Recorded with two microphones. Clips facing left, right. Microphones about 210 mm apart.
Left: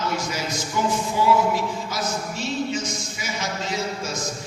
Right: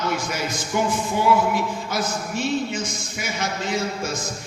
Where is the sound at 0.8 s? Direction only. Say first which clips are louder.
Right 1 dB; 60° right (ahead or behind).